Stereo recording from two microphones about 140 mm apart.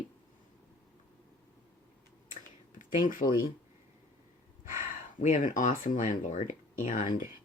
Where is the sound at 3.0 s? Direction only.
75° left (ahead or behind).